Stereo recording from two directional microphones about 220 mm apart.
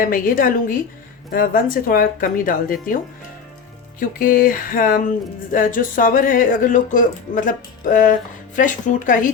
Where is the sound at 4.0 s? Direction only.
40° left (ahead or behind).